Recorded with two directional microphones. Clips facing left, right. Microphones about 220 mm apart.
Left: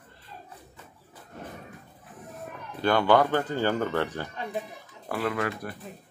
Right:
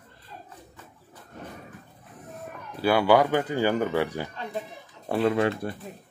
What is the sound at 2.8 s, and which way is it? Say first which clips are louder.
Speech: right 2 dB; 10° right (ahead or behind).